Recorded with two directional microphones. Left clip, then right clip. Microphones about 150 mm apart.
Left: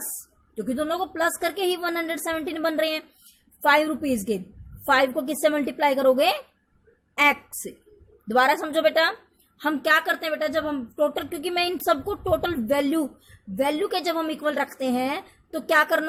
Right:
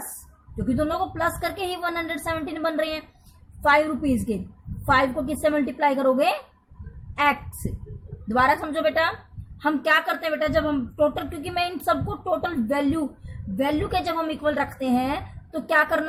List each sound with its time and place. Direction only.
0.5 s a woman's voice: 60° left (ahead or behind)
8.3 s a woman's voice: 60° left (ahead or behind)
13.6 s a woman's voice: 80° left; by 16.0 s 65° left (ahead or behind)